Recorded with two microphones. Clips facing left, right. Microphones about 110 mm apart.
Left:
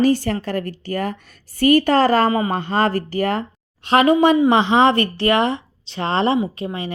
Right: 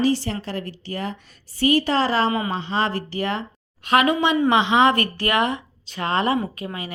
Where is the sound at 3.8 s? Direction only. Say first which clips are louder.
Left 5 dB; 30° left (ahead or behind).